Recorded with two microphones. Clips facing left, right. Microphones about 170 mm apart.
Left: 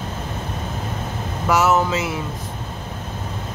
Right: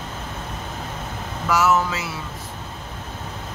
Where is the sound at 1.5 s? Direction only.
25° left (ahead or behind).